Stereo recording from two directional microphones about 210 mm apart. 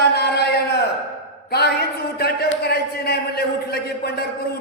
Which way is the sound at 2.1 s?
50° left (ahead or behind).